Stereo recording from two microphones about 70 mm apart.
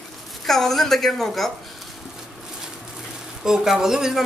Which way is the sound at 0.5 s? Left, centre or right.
Centre.